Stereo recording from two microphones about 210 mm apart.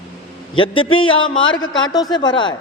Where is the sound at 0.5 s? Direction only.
25° left (ahead or behind).